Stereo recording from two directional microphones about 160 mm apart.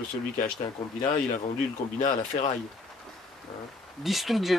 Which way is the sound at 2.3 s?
35° left (ahead or behind).